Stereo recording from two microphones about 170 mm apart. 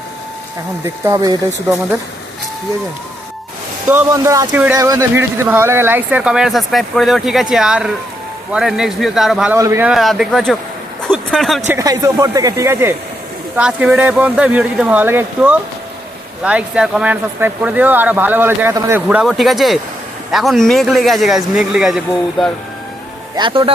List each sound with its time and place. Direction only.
1.0 s speech: 20° right (ahead or behind)
3.8 s speech: 15° right (ahead or behind)
9.6 s speech: 15° right (ahead or behind)
9.9 s speech: centre (ahead or behind)
11.7 s speech: 20° right (ahead or behind)
19.0 s speech: 5° right (ahead or behind)
23.4 s speech: 30° right (ahead or behind)